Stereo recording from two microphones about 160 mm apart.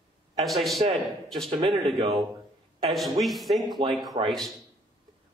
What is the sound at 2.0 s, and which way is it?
Speech, 35° right (ahead or behind).